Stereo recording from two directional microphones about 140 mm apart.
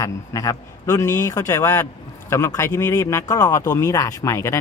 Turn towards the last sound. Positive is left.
turn(degrees=20)  # may be behind; listen again after turning